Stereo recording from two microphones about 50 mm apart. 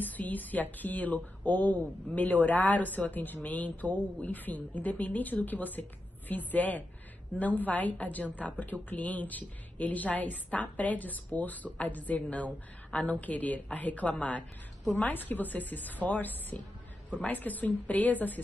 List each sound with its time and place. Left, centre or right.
0.0 s a woman's voice: left